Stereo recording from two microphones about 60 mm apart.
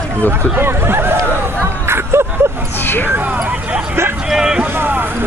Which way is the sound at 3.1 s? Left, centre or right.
Right.